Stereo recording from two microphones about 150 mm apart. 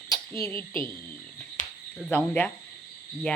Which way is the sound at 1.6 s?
60° left (ahead or behind).